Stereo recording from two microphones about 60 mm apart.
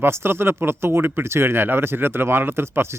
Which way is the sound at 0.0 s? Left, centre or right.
Right.